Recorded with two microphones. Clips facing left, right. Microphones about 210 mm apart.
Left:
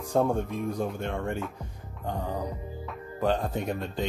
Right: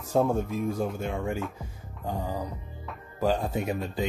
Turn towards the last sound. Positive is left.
turn(degrees=-5)  # may be behind; listen again after turning